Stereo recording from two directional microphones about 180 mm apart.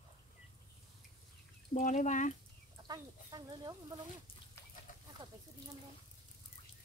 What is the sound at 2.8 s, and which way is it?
Speech, 20° right (ahead or behind).